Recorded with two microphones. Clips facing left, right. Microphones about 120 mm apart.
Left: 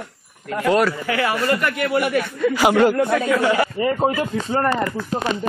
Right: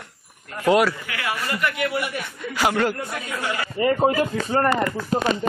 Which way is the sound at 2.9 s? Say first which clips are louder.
Left 11 dB; 80° left.